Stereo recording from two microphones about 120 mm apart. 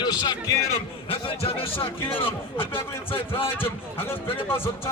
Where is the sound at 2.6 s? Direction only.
20° left (ahead or behind).